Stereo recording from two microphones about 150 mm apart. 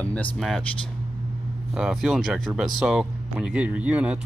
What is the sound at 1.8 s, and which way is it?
Speech, 5° right (ahead or behind).